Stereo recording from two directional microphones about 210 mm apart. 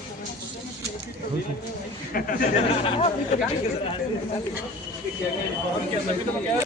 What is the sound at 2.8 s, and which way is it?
Speech, 25° left (ahead or behind).